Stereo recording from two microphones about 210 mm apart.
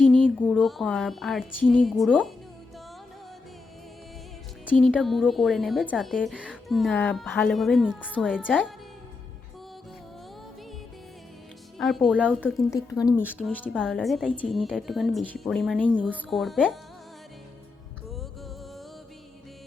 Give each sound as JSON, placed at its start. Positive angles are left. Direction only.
{"t": 0.0, "sound": "a woman's voice", "side_deg": 5}
{"t": 4.7, "sound": "a woman's voice", "side_deg": 5}
{"t": 11.8, "sound": "a woman's voice", "side_deg": 0}
{"t": 12.5, "sound": "speech", "side_deg": 15}
{"t": 13.7, "sound": "a woman's voice", "side_deg": 0}
{"t": 18.1, "sound": "music", "side_deg": 0}